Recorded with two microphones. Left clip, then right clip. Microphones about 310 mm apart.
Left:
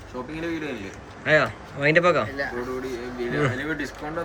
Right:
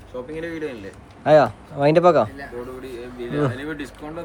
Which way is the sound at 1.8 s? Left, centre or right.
Centre.